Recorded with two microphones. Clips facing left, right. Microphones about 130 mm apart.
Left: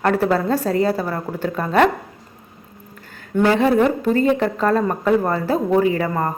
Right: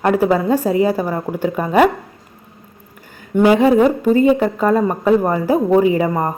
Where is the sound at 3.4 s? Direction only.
10° right (ahead or behind).